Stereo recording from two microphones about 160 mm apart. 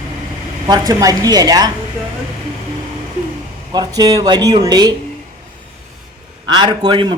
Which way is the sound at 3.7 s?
25° right (ahead or behind).